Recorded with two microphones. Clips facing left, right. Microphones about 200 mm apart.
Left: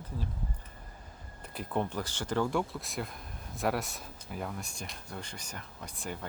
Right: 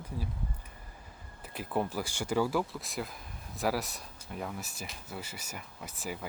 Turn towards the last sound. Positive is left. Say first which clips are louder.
# right 1 dB
turn(degrees=-5)  # may be behind; listen again after turning